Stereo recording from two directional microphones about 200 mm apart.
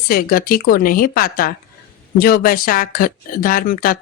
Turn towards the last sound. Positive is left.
turn(degrees=45)  # may be behind; listen again after turning